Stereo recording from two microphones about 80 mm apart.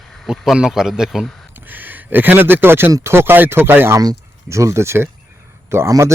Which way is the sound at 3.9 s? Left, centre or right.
Right.